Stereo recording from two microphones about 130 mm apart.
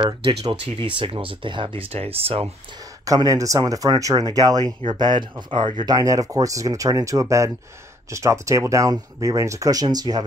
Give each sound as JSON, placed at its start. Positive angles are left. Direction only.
{"t": 0.2, "sound": "speech", "side_deg": -45}
{"t": 3.1, "sound": "speech", "side_deg": -25}